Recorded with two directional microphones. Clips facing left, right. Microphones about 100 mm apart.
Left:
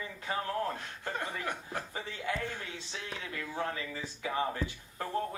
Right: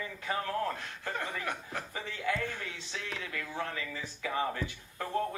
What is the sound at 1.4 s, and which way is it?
Speech, 25° left (ahead or behind).